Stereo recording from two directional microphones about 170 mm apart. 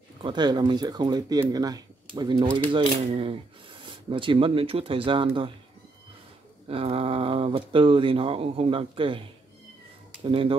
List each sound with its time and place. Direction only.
0.2 s speech: 25° right (ahead or behind)
6.7 s speech: 35° right (ahead or behind)
10.2 s speech: 30° right (ahead or behind)